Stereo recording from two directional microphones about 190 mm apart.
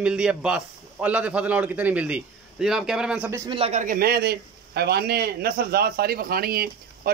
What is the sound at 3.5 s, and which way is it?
Speech, 35° right (ahead or behind).